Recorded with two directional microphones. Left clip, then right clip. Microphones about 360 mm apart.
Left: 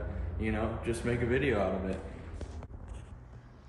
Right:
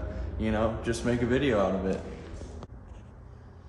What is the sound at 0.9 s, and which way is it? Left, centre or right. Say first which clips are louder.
Speech: right 4 dB; centre.